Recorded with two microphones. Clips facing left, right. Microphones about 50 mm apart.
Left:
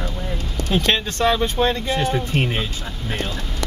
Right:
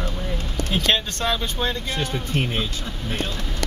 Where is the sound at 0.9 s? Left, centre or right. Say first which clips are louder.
Left 5 dB; left.